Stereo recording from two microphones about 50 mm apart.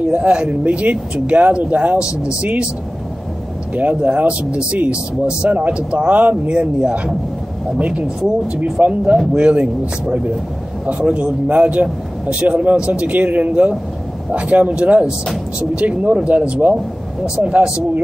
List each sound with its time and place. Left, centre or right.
0.0 s speech: right
3.7 s speech: right
8.8 s speech: right